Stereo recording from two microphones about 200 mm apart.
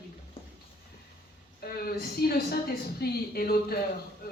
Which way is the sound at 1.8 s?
50° left (ahead or behind).